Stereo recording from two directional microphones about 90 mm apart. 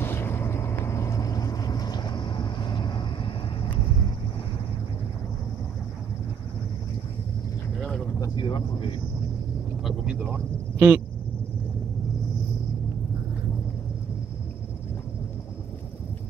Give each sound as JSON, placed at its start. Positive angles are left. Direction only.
{"t": 0.0, "sound": "vehicle", "side_deg": 25}
{"t": 8.4, "sound": "speech", "side_deg": 65}
{"t": 10.0, "sound": "speech", "side_deg": -15}